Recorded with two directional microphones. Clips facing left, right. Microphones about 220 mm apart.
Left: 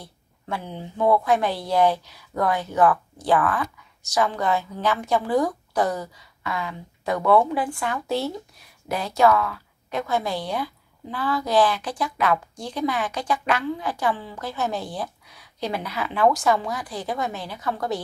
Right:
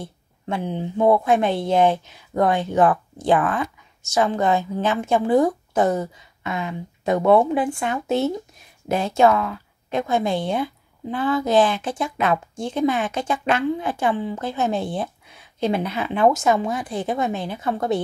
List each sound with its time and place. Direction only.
0.0 s a woman's voice: 20° right (ahead or behind)